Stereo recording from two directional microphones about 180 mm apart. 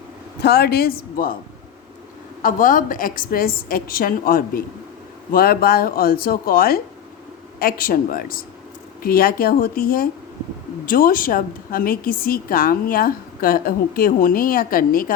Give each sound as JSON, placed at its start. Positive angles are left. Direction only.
{"t": 0.4, "sound": "speech", "side_deg": 65}
{"t": 2.4, "sound": "a woman's voice", "side_deg": 50}